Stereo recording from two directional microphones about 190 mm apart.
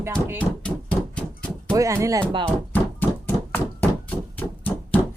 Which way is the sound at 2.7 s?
10° left (ahead or behind).